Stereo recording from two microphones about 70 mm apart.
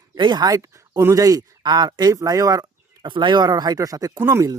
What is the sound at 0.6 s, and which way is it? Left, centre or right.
Speech, right.